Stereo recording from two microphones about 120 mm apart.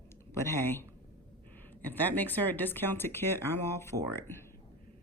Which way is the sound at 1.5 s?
15° left (ahead or behind).